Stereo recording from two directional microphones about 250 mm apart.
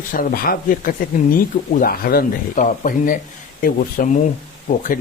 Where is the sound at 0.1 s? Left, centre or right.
Left.